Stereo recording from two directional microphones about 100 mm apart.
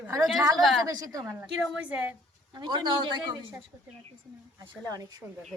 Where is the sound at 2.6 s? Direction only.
50° right (ahead or behind).